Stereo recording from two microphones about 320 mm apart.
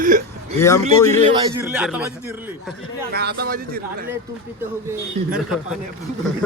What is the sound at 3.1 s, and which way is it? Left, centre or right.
Speech, right.